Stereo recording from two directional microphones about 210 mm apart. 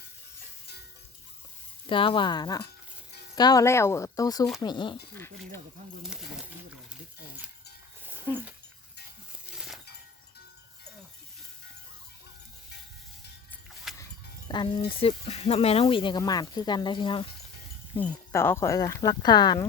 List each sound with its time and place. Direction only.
1.9 s speech: 25° left (ahead or behind)
5.1 s speech: 10° left (ahead or behind)
6.0 s speech: centre (ahead or behind)
8.0 s dog: 10° right (ahead or behind)
9.6 s chink: centre (ahead or behind)
14.0 s music: 20° left (ahead or behind)
14.8 s speech: 30° left (ahead or behind)
18.0 s speech: 10° left (ahead or behind)